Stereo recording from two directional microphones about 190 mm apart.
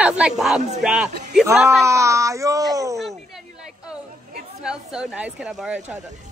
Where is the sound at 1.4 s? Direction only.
15° right (ahead or behind).